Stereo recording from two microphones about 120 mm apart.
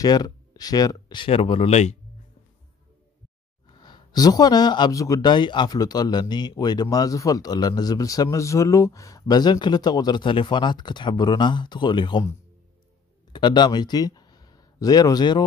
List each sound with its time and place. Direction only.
0.0 s speech: 35° left (ahead or behind); by 1.8 s 50° left (ahead or behind)
3.6 s speech: 40° left (ahead or behind)
13.3 s speech: 40° left (ahead or behind)